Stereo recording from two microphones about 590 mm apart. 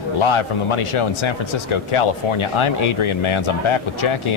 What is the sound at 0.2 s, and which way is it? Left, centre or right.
Speech, left.